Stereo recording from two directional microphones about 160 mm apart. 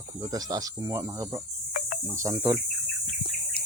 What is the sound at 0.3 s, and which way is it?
Speech, 20° right (ahead or behind).